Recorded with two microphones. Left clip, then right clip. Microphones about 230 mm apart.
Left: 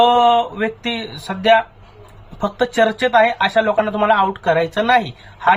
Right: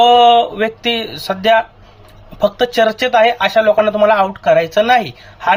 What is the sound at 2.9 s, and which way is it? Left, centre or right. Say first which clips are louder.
Speech: right 2 dB; centre.